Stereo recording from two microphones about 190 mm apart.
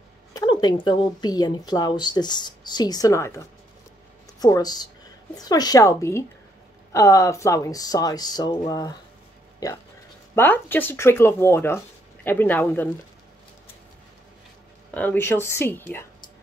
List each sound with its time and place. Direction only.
0.3 s speech: 20° left (ahead or behind)
10.3 s speech: 10° left (ahead or behind)
15.0 s speech: 10° left (ahead or behind)